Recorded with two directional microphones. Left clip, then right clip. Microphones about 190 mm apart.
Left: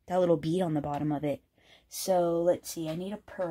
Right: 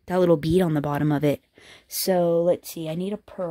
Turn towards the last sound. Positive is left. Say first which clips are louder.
# right 6 dB
turn(degrees=-55)  # may be behind; listen again after turning